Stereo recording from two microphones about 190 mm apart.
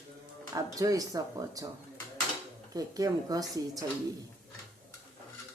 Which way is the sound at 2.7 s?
20° right (ahead or behind).